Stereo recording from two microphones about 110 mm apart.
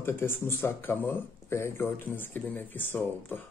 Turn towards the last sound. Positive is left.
turn(degrees=15)  # may be behind; listen again after turning